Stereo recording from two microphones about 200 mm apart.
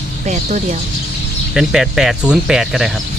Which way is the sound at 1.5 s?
Centre (ahead or behind).